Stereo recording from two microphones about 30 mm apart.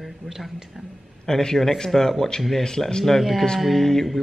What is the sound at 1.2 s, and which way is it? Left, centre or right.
A man's voice, centre.